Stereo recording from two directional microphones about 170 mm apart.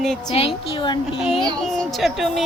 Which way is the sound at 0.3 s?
30° left (ahead or behind).